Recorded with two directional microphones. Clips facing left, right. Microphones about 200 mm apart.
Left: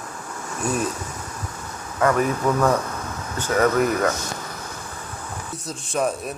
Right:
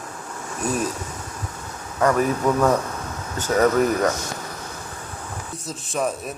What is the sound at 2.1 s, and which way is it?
Speech, centre (ahead or behind).